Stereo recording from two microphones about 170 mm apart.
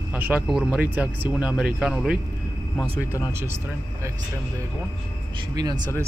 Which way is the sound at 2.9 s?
20° left (ahead or behind).